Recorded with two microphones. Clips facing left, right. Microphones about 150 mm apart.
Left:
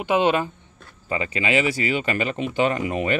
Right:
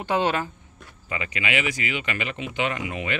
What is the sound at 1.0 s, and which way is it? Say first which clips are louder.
Speech: left 5 dB; 35° left (ahead or behind).